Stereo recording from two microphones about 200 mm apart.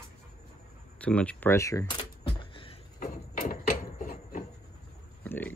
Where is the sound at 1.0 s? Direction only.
5° left (ahead or behind); by 2.7 s 25° left (ahead or behind).